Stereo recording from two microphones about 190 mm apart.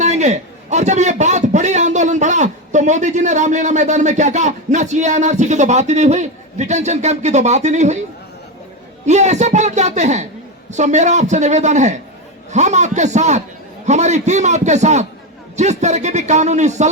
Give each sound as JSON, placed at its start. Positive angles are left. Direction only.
{"t": 0.0, "sound": "a man's voice", "side_deg": -35}
{"t": 9.0, "sound": "a man's voice", "side_deg": -35}